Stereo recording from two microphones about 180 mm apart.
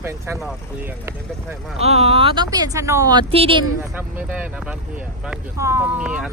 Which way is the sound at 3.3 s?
30° right (ahead or behind).